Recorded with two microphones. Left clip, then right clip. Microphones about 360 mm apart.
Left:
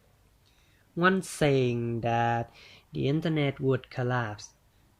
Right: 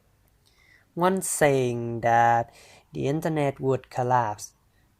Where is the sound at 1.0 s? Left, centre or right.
Centre.